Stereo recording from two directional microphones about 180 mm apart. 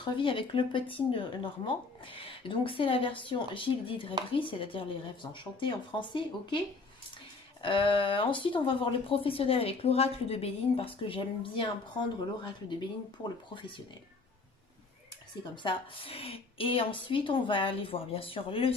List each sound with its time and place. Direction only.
0.0 s speech: 25° left (ahead or behind)
7.6 s speech: 30° left (ahead or behind)
13.6 s speech: 25° left (ahead or behind)
15.6 s a woman's voice: 30° left (ahead or behind)